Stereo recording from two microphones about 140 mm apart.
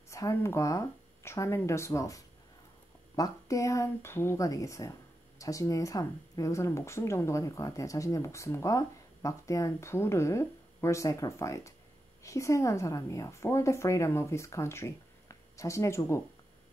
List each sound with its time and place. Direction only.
0.1 s speech: 20° left (ahead or behind)